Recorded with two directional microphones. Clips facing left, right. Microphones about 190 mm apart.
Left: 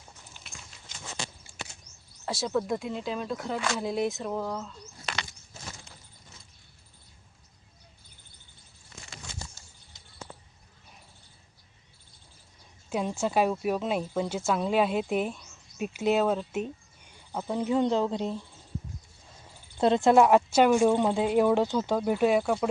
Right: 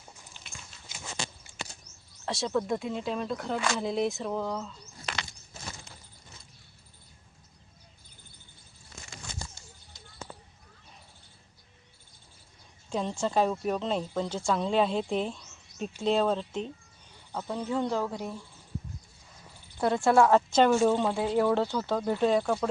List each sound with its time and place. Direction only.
0.4 s horse: 5° right (ahead or behind)
1.5 s a sound: 20° right (ahead or behind)
2.2 s speech: centre (ahead or behind)
12.9 s a woman's voice: 10° left (ahead or behind)
19.8 s a woman's voice: 20° left (ahead or behind)